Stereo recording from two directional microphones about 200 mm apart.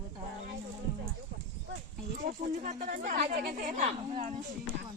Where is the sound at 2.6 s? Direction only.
40° right (ahead or behind).